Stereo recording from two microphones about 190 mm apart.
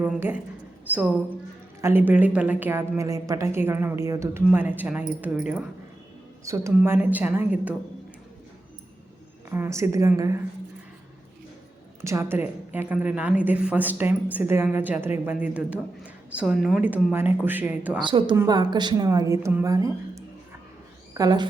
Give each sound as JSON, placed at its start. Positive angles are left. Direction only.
{"t": 0.0, "sound": "a woman's voice", "side_deg": -10}
{"t": 9.5, "sound": "a woman's voice", "side_deg": -15}
{"t": 12.0, "sound": "a woman's voice", "side_deg": -15}
{"t": 18.0, "sound": "a woman's voice", "side_deg": -25}